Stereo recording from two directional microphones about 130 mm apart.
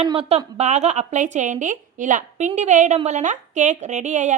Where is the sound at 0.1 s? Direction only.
50° right (ahead or behind).